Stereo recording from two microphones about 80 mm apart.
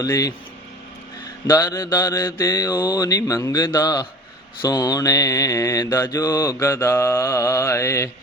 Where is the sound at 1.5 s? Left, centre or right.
Left.